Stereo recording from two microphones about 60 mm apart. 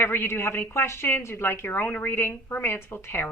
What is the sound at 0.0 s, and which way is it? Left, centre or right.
A woman's voice, left.